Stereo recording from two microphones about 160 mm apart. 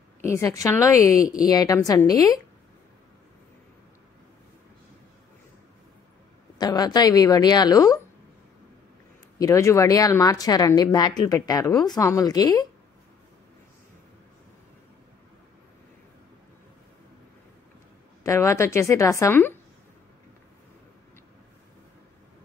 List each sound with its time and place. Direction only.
0.2 s speech: 20° left (ahead or behind)
6.6 s speech: 25° left (ahead or behind)
9.4 s speech: 20° left (ahead or behind)
18.2 s a woman's voice: 20° left (ahead or behind)